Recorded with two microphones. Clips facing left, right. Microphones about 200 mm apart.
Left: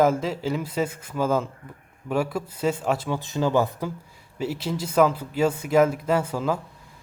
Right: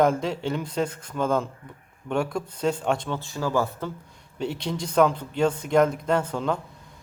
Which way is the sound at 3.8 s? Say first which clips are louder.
Left 2 dB; 5° left (ahead or behind).